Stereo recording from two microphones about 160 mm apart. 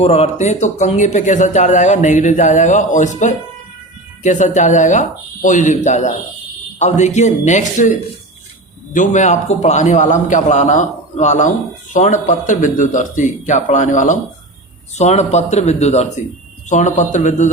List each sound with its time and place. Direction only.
0.0 s speech: 40° left (ahead or behind)